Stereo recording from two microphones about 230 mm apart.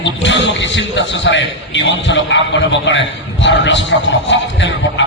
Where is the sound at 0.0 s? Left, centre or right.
Left.